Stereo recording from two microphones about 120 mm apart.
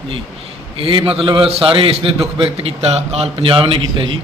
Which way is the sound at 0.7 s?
45° right (ahead or behind).